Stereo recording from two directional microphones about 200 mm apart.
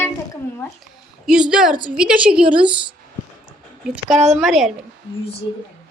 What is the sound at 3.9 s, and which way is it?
Speech, 5° right (ahead or behind).